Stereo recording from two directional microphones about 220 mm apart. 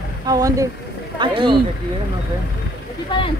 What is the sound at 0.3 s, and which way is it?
Speech, 15° right (ahead or behind).